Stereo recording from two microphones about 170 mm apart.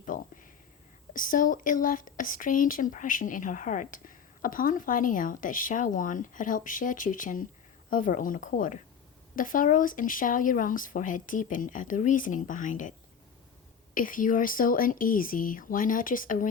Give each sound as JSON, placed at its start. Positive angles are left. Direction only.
{"t": 0.0, "sound": "a sound", "side_deg": 50}
{"t": 1.1, "sound": "speech", "side_deg": 55}
{"t": 13.9, "sound": "speech", "side_deg": 55}